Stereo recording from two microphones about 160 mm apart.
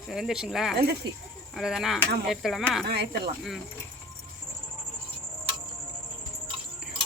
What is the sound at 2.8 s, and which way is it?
Speech, 90° right.